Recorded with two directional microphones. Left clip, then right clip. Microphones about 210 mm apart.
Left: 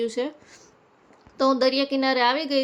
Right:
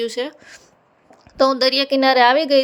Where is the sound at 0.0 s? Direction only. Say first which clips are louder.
Right 3 dB; 30° right (ahead or behind).